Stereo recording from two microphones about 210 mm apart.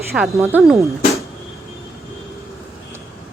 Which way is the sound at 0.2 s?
Centre (ahead or behind).